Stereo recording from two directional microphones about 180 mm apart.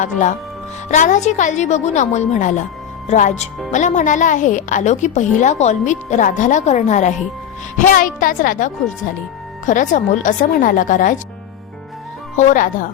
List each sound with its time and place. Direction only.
0.0 s a woman's voice: 45° left (ahead or behind)
12.4 s a woman's voice: 45° left (ahead or behind)